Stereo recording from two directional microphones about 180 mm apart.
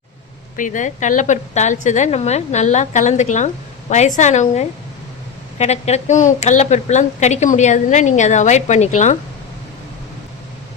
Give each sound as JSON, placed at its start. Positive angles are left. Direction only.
{"t": 0.5, "sound": "a woman's voice", "side_deg": 45}